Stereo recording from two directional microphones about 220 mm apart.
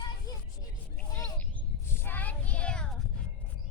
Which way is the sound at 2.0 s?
10° left (ahead or behind).